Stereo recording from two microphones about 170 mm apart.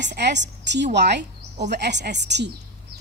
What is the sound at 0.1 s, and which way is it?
A woman's voice, 90° right.